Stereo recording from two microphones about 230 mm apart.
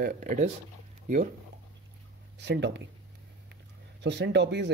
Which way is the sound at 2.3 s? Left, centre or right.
Right.